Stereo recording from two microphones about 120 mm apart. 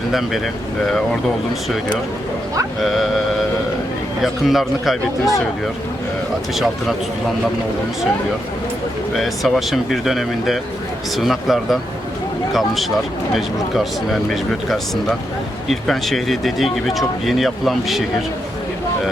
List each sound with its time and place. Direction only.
0.1 s speech: centre (ahead or behind)
2.8 s speech: centre (ahead or behind)
4.2 s speech: centre (ahead or behind)
9.1 s speech: centre (ahead or behind)